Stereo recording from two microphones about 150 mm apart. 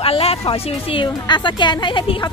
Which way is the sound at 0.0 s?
40° left (ahead or behind).